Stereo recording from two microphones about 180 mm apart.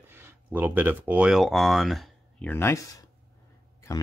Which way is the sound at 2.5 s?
15° left (ahead or behind).